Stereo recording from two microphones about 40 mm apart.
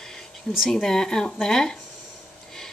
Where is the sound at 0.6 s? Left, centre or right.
Centre.